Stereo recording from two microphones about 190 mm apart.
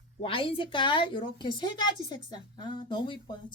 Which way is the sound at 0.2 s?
30° left (ahead or behind).